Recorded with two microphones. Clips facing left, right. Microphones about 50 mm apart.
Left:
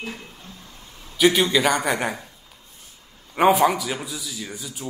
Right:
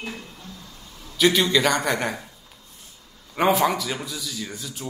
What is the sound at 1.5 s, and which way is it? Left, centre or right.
Speech, centre.